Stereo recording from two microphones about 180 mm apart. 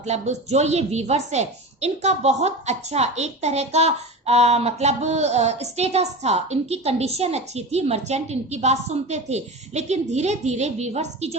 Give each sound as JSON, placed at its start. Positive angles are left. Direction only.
{"t": 0.0, "sound": "a woman's voice", "side_deg": -40}